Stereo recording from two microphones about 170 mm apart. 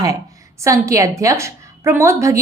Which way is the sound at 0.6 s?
20° right (ahead or behind).